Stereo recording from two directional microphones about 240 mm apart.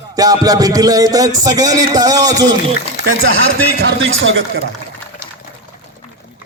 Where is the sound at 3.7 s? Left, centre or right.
Right.